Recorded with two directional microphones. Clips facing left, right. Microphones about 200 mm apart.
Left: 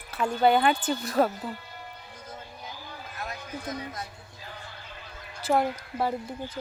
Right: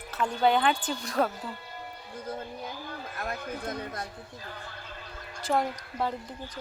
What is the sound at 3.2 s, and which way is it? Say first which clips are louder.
Speech: right 2 dB; 55° right (ahead or behind).